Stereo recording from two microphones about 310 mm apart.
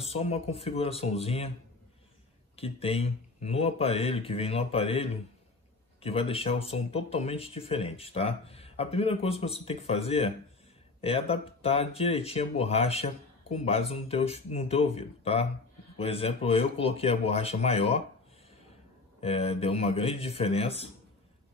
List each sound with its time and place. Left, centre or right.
0.0 s speech: centre
2.5 s speech: centre
19.2 s speech: centre